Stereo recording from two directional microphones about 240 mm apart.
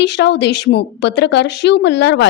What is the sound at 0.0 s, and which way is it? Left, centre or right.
A woman's voice, left.